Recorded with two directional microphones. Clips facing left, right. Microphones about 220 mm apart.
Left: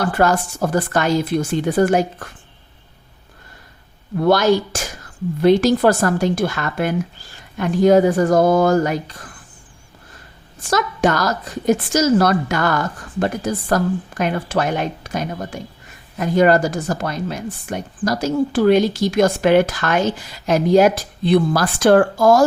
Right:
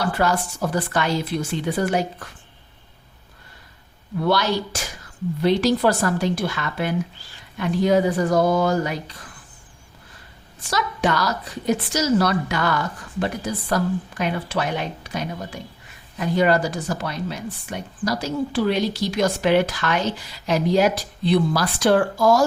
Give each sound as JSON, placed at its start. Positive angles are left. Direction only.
{"t": 0.0, "sound": "a woman's voice", "side_deg": 50}
{"t": 4.2, "sound": "a woman's voice", "side_deg": 45}
{"t": 10.6, "sound": "a woman's voice", "side_deg": 45}